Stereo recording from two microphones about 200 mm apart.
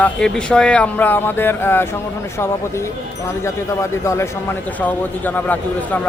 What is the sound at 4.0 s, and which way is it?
Speech, 15° left (ahead or behind).